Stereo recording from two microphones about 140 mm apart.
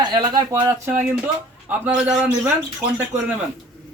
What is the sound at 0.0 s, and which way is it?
Speech, 30° right (ahead or behind).